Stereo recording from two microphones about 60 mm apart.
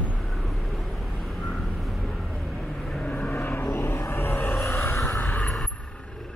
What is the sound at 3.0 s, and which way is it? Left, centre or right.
Vehicle, left.